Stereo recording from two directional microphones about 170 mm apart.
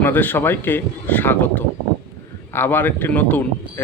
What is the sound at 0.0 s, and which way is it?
Speech, 10° left (ahead or behind).